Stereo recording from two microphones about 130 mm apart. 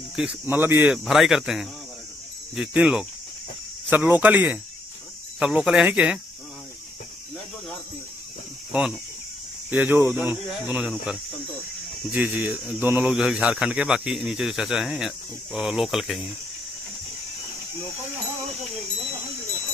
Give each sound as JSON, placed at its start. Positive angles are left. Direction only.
{"t": 0.1, "sound": "speech", "side_deg": -5}
{"t": 0.6, "sound": "speech", "side_deg": -15}
{"t": 0.9, "sound": "speech", "side_deg": -5}
{"t": 9.7, "sound": "speech", "side_deg": -15}